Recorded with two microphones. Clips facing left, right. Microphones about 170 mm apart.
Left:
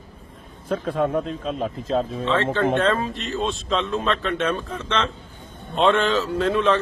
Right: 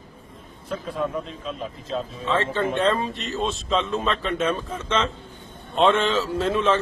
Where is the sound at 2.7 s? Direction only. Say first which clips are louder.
Left 1 dB; centre (ahead or behind).